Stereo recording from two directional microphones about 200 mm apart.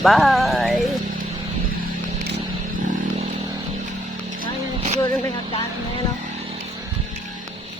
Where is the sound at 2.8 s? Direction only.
40° right (ahead or behind).